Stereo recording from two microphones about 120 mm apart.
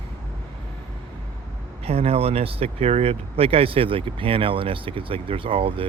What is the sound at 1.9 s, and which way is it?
Speech, 55° right (ahead or behind).